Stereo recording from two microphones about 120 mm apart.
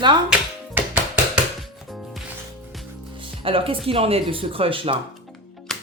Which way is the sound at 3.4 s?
50° right (ahead or behind).